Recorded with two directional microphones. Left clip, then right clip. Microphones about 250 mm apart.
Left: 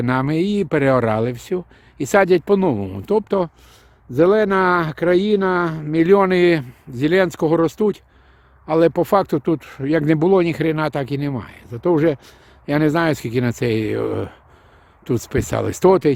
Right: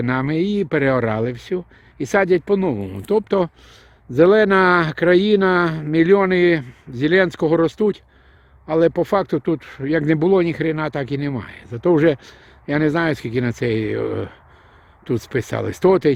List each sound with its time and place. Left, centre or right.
0.0 s speech: centre
4.1 s speech: centre
6.1 s speech: centre